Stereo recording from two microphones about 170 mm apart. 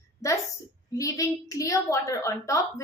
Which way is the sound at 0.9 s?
20° left (ahead or behind).